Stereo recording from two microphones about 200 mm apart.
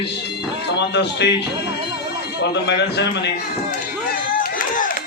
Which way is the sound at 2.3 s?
60° left (ahead or behind).